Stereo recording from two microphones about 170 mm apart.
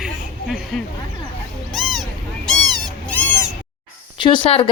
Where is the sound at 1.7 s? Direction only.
Centre (ahead or behind).